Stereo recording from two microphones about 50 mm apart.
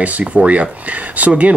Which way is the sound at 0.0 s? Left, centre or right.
Right.